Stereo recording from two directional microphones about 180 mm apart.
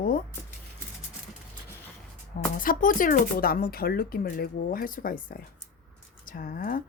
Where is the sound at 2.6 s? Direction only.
50° left (ahead or behind).